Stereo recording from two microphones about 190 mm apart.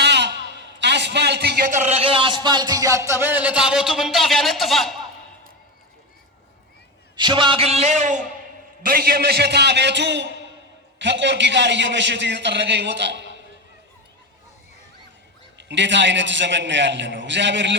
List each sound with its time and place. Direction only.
0.0 s a sound: 65° right (ahead or behind)
0.8 s a man's voice: 65° right (ahead or behind); by 4.9 s centre (ahead or behind)
7.2 s a man's voice: 25° right (ahead or behind)
8.8 s a man's voice: 50° right (ahead or behind); by 13.2 s 65° right (ahead or behind)
15.5 s a man's voice: 70° right (ahead or behind)